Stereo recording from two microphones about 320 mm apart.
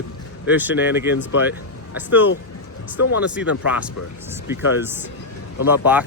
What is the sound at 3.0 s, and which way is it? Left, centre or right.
Speech, left.